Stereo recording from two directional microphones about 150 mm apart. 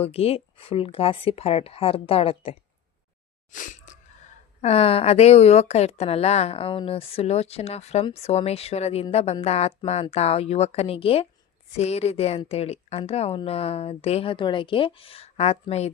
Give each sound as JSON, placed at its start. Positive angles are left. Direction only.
{"t": 0.0, "sound": "speech", "side_deg": 40}
{"t": 3.5, "sound": "crunch", "side_deg": 60}
{"t": 4.6, "sound": "speech", "side_deg": 40}